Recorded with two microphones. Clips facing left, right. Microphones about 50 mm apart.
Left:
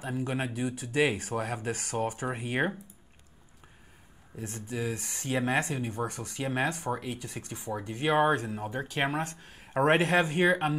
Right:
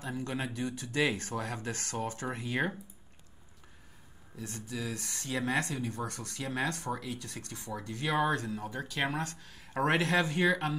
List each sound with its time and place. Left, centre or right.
0.0 s speech: centre
2.4 s speech: left
4.4 s speech: left
7.7 s speech: left